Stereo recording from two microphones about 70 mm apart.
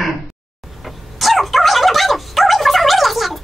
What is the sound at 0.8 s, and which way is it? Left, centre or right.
Dog, centre.